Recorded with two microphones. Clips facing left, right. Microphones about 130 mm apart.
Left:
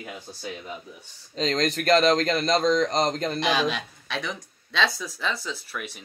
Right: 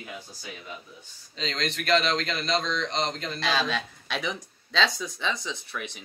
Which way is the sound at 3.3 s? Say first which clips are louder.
Right 1 dB; 15° left (ahead or behind).